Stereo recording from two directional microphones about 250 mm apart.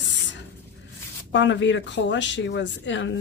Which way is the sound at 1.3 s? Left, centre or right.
Left.